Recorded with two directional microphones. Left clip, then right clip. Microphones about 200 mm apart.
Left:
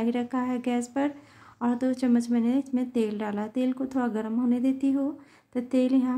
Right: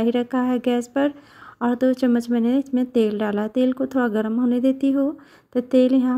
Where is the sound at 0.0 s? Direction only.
25° right (ahead or behind).